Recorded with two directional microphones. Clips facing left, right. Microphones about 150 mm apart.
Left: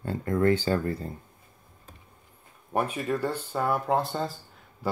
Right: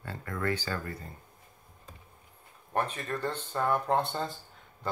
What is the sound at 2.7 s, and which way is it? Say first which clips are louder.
Speech: left 4 dB; 10° left (ahead or behind).